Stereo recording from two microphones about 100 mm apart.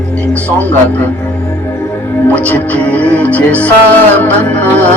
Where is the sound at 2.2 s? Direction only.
15° left (ahead or behind).